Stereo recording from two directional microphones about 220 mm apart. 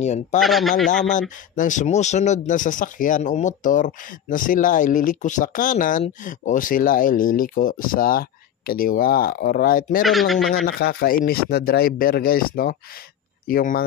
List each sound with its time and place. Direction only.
0.0 s speech: 30° left (ahead or behind)
0.4 s speech: centre (ahead or behind)
1.5 s speech: 35° left (ahead or behind)
10.0 s speech: centre (ahead or behind)
10.6 s speech: 45° left (ahead or behind)